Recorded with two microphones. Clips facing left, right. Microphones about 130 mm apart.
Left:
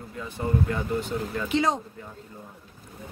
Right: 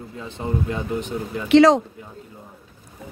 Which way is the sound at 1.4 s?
85° right.